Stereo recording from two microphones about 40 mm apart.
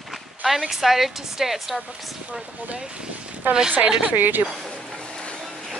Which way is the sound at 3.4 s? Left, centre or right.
Right.